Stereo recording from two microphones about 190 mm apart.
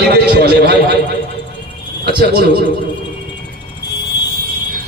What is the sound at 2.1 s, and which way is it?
Speech, 60° right (ahead or behind).